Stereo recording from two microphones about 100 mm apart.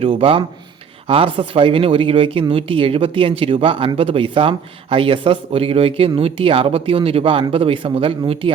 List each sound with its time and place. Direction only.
0.0 s speech: 65° right (ahead or behind)